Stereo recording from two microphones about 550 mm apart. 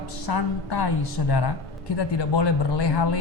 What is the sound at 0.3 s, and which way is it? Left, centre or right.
A woman's voice, left.